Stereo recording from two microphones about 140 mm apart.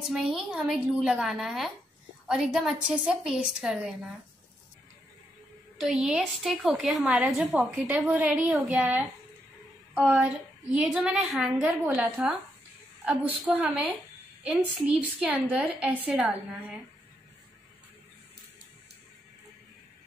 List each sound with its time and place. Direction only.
0.1 s a woman's voice: centre (ahead or behind)
5.8 s a woman's voice: 5° right (ahead or behind)
11.8 s a woman's voice: 15° right (ahead or behind)
13.5 s a woman's voice: 10° right (ahead or behind)